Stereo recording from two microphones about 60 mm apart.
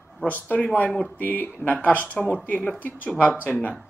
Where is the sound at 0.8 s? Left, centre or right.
Centre.